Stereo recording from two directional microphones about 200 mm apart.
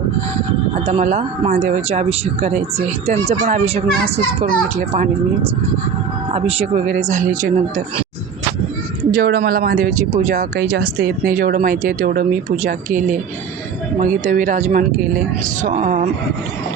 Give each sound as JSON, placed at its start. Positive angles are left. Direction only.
{"t": 0.9, "sound": "speech", "side_deg": -35}
{"t": 6.3, "sound": "speech", "side_deg": -30}
{"t": 9.1, "sound": "speech", "side_deg": -45}